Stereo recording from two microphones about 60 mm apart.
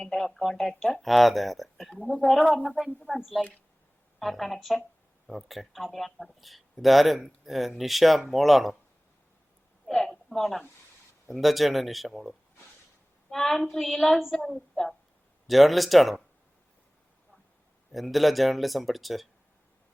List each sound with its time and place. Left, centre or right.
0.0 s speech: centre
1.9 s speech: centre
2.4 s speech: centre
2.6 s speech: centre
9.8 s a woman's voice: centre
17.9 s speech: centre